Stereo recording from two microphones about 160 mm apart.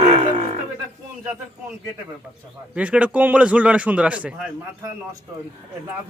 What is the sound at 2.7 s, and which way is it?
A man's voice, 10° right (ahead or behind).